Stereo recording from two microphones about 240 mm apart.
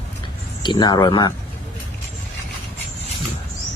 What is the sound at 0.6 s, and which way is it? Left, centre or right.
Speech, centre.